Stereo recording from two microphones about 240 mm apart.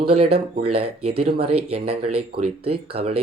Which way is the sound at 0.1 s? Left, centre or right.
Right.